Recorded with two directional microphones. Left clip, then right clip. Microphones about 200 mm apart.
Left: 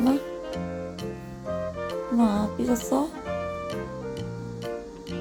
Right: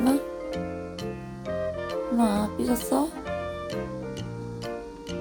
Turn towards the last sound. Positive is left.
turn(degrees=0)  # may be behind; listen again after turning